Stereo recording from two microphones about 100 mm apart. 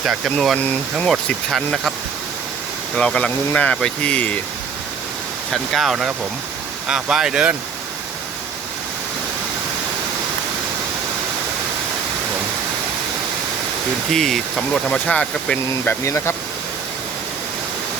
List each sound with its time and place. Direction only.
0.3 s speech: 5° left (ahead or behind)
2.9 s speech: 10° left (ahead or behind)
5.5 s speech: centre (ahead or behind)
14.1 s speech: 5° left (ahead or behind)
15.9 s speech: 25° left (ahead or behind)